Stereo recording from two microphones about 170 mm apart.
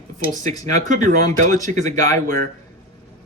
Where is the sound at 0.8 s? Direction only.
45° right (ahead or behind).